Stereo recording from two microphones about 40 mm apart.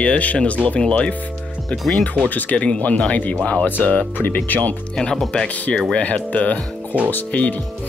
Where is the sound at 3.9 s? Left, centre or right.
Left.